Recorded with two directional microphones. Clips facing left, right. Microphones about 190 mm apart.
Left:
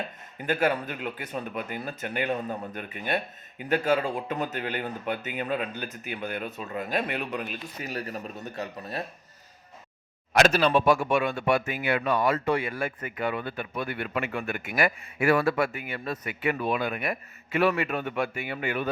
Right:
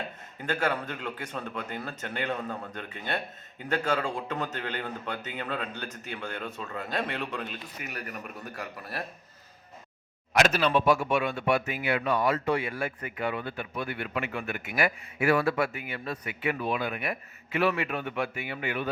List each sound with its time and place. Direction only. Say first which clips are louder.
0.4 s speech: left 3 dB; 15° left (ahead or behind)
7.8 s speech: left 6 dB; 30° left (ahead or behind)
10.3 s speech: left 3 dB; 35° left (ahead or behind)
10.8 s speech: left 2 dB; 50° left (ahead or behind)